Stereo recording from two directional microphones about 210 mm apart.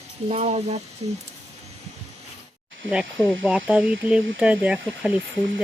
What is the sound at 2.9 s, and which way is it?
Speech, 5° right (ahead or behind).